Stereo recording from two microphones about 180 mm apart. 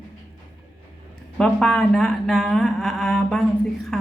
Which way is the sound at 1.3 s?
5° left (ahead or behind).